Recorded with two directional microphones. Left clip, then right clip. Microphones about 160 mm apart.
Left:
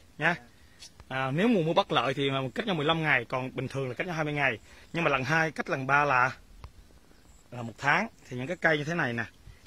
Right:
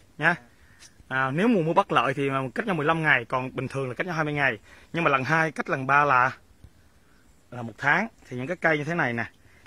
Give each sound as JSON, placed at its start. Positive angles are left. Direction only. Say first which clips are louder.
{"t": 1.0, "sound": "speech", "louder": "right 4 dB", "side_deg": -35}
{"t": 7.5, "sound": "speech", "louder": "right 3 dB", "side_deg": -45}